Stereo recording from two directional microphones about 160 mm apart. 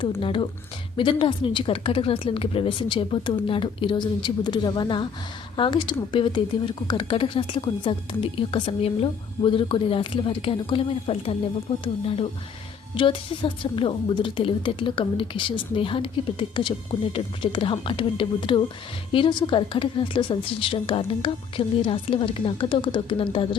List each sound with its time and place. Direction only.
0.2 s speech: 35° left (ahead or behind)